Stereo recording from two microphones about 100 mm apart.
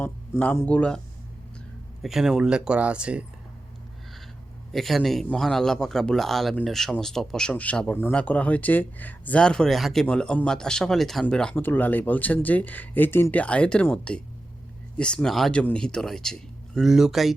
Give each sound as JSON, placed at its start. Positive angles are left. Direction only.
{"t": 0.0, "sound": "speech", "side_deg": 15}
{"t": 2.0, "sound": "speech", "side_deg": 0}
{"t": 4.7, "sound": "speech", "side_deg": 0}
{"t": 7.5, "sound": "speech", "side_deg": 15}
{"t": 11.5, "sound": "speech", "side_deg": 20}